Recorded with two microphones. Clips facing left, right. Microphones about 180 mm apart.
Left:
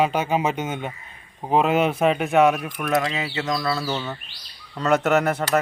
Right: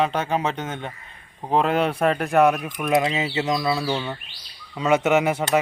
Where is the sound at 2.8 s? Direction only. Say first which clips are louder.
Right 3 dB; 20° right (ahead or behind).